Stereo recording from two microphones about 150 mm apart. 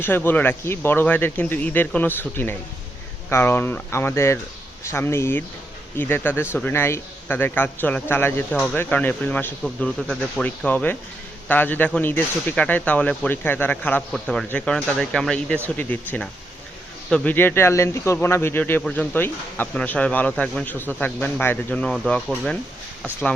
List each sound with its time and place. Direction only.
0.0 s a man's voice: 15° left (ahead or behind)
17.1 s a man's voice: 5° left (ahead or behind)